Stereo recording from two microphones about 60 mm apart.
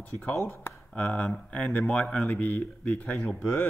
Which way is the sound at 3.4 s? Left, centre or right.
Left.